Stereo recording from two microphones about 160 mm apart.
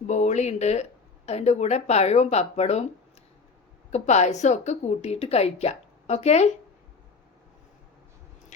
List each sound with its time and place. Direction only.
0.1 s speech: 45° left (ahead or behind)
3.9 s speech: 45° left (ahead or behind)